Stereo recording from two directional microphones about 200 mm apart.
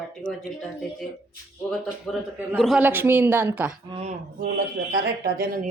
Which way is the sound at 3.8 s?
25° right (ahead or behind).